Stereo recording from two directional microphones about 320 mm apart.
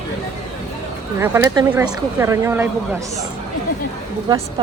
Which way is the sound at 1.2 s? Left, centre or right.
Centre.